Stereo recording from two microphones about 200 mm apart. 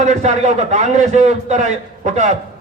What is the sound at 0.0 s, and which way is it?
A man's voice, 35° right (ahead or behind).